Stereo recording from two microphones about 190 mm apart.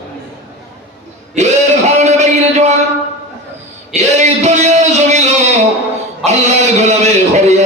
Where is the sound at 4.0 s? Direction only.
40° right (ahead or behind).